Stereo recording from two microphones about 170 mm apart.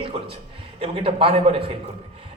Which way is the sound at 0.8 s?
35° right (ahead or behind).